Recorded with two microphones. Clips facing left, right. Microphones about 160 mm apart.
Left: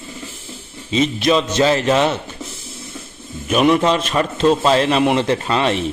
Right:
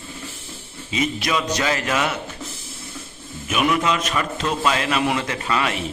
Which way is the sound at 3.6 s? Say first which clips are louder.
Left 5 dB; 30° left (ahead or behind).